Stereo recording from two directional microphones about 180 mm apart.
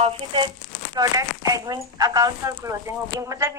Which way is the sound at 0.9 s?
20° right (ahead or behind).